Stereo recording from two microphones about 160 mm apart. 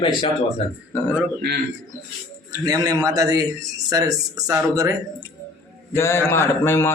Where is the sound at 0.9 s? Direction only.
15° left (ahead or behind).